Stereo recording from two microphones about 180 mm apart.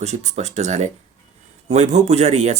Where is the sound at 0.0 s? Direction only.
40° right (ahead or behind).